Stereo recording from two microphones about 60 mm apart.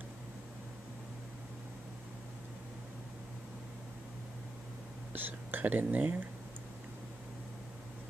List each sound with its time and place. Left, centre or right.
5.1 s speech: right